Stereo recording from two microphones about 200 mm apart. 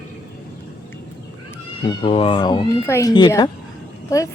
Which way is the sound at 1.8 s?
25° left (ahead or behind).